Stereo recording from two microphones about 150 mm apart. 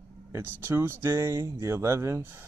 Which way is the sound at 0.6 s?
15° right (ahead or behind).